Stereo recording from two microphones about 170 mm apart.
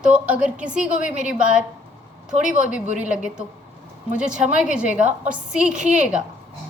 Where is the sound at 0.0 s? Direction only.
5° right (ahead or behind).